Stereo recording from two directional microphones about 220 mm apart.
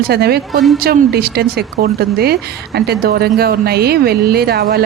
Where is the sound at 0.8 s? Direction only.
45° right (ahead or behind).